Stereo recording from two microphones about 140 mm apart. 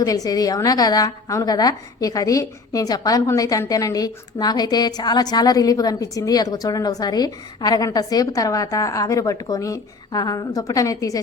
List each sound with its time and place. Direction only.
0.0 s a woman's voice: 25° left (ahead or behind)